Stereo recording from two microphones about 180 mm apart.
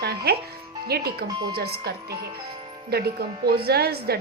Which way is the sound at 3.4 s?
60° right (ahead or behind).